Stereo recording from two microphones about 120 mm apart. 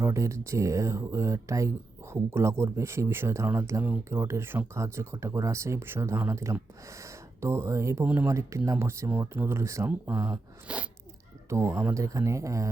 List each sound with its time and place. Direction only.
0.0 s speech: 25° right (ahead or behind)
8.0 s speech: 10° right (ahead or behind)
8.3 s speech: 25° right (ahead or behind)
10.7 s speech: 10° right (ahead or behind)
11.4 s speech: 25° right (ahead or behind)